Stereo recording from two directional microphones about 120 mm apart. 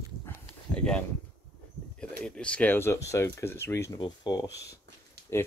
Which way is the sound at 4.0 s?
35° left (ahead or behind).